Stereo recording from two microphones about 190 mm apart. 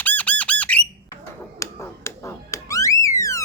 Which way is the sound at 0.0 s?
10° left (ahead or behind).